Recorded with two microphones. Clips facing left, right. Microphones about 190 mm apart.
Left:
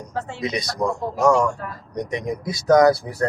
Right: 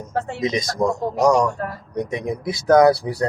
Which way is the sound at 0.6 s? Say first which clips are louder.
Right 3 dB; 45° right (ahead or behind).